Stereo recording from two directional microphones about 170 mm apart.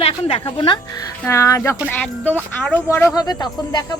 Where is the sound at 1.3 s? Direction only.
20° left (ahead or behind).